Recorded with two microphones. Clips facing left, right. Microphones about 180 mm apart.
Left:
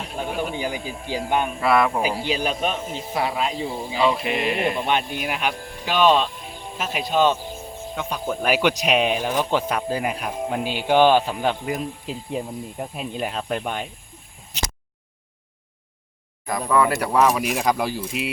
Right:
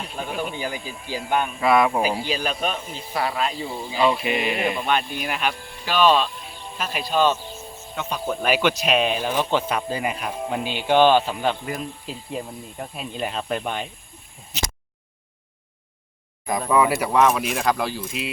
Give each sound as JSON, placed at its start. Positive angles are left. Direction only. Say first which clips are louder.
{"t": 0.5, "sound": "speech", "louder": "left 2 dB", "side_deg": 15}
{"t": 1.6, "sound": "speech", "louder": "right 1 dB", "side_deg": 0}
{"t": 2.2, "sound": "speech", "louder": "left 2 dB", "side_deg": 15}
{"t": 3.6, "sound": "speech", "louder": "even", "side_deg": 0}
{"t": 4.9, "sound": "speech", "louder": "even", "side_deg": 20}
{"t": 16.5, "sound": "speech", "louder": "even", "side_deg": -20}
{"t": 17.0, "sound": "speech", "louder": "even", "side_deg": 0}